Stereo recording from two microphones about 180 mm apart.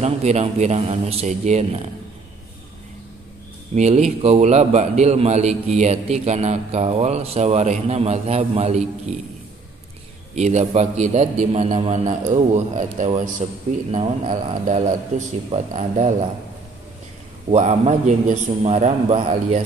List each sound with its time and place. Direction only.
0.0 s a man's voice: 35° right (ahead or behind)
3.7 s a man's voice: 40° right (ahead or behind)
10.3 s a man's voice: 40° right (ahead or behind)
17.5 s a man's voice: 40° right (ahead or behind)